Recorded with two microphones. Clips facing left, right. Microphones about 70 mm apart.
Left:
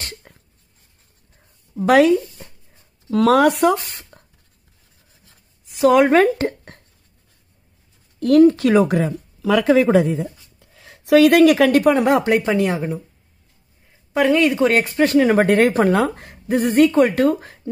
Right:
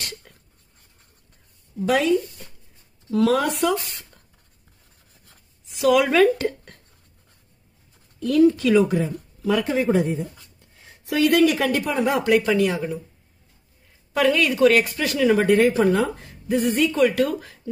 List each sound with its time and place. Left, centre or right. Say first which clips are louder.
0.3 s a sound: left 3 dB; left
1.8 s a woman's voice: left 6 dB; left
3.6 s speech: left 5 dB; left
5.8 s speech: left 4 dB; left
8.2 s a woman's voice: left 5 dB; left
8.9 s a woman's voice: left 4 dB; left
12.2 s speech: left 1 dB; left
14.1 s speech: left 4 dB; left